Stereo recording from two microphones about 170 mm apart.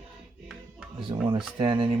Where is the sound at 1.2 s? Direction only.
30° right (ahead or behind).